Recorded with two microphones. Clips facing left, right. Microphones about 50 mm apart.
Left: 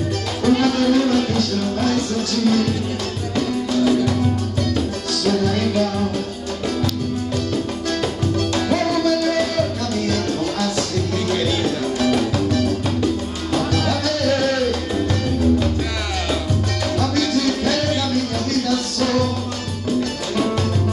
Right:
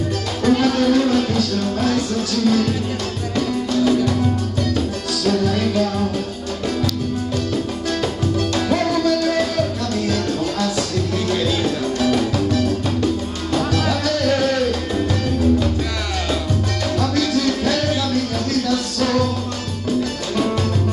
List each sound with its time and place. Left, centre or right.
0.5 s music: centre
5.3 s music: centre
8.5 s music: centre
11.2 s music: centre
13.6 s music: centre
17.0 s music: centre